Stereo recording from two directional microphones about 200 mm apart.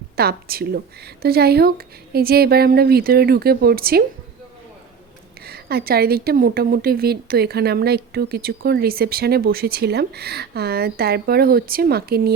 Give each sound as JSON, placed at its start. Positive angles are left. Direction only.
{"t": 0.2, "sound": "a woman's voice", "side_deg": -50}
{"t": 5.5, "sound": "a woman's voice", "side_deg": -50}